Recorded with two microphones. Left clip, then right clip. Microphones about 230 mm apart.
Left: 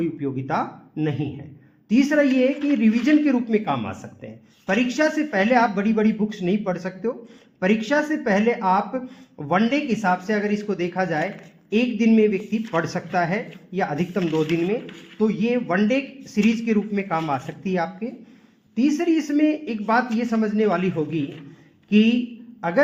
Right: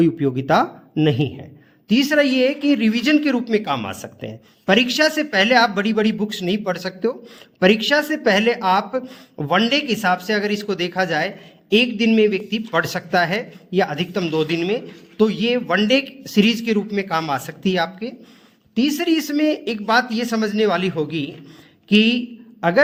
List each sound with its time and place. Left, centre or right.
0.0 s speech: right